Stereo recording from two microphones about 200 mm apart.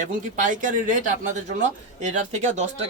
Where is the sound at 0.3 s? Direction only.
40° right (ahead or behind).